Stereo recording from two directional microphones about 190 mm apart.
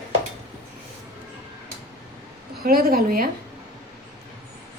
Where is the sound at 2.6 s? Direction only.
50° right (ahead or behind).